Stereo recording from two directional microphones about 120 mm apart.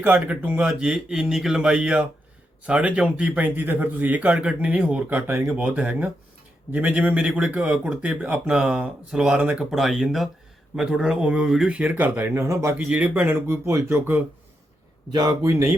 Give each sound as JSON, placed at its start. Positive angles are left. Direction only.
{"t": 0.0, "sound": "speech", "side_deg": -15}
{"t": 12.7, "sound": "speech", "side_deg": -10}
{"t": 15.1, "sound": "a man's voice", "side_deg": -35}